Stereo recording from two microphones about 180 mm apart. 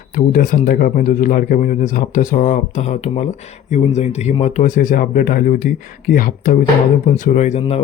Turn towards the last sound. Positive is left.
turn(degrees=40)  # may be behind; listen again after turning